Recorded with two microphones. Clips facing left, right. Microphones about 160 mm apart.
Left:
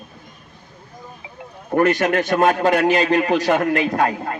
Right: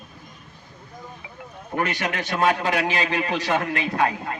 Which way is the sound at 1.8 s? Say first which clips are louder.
Left 9 dB; 45° left (ahead or behind).